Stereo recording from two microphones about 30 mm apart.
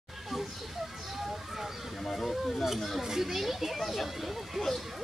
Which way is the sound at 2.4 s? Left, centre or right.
Centre.